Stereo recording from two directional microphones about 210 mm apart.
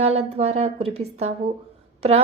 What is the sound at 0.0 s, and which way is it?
A woman's voice, 30° right (ahead or behind).